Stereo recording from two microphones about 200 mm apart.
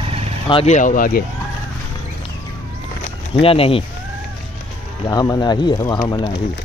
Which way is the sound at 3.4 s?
30° left (ahead or behind).